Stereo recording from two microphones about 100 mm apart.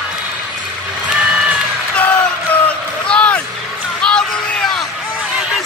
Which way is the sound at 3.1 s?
10° left (ahead or behind).